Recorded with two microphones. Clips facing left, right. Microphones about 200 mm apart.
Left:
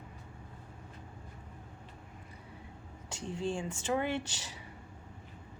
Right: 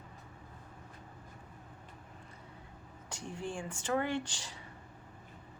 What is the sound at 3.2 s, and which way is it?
Speech, 25° left (ahead or behind).